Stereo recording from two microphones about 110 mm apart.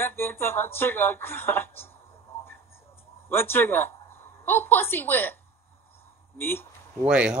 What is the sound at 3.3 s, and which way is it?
A woman's voice, 20° left (ahead or behind).